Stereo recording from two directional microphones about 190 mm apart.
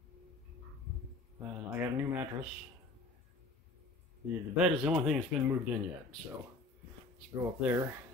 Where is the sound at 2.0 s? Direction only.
10° right (ahead or behind).